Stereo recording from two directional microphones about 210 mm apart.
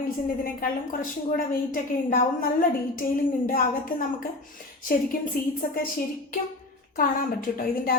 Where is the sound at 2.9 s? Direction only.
40° left (ahead or behind).